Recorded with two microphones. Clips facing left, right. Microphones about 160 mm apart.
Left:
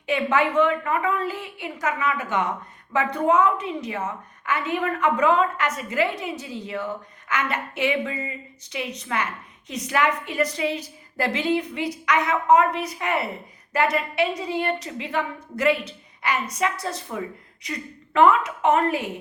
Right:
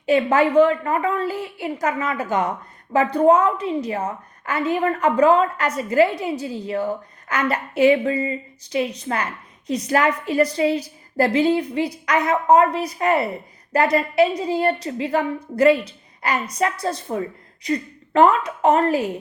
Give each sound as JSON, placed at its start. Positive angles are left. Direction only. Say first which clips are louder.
{"t": 0.0, "sound": "a woman's voice", "louder": "right 5 dB", "side_deg": -35}